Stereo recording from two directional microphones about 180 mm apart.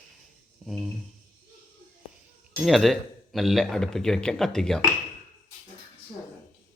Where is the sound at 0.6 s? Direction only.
Centre (ahead or behind).